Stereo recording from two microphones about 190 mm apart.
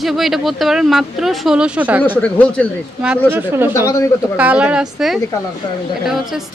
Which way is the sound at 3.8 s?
15° left (ahead or behind).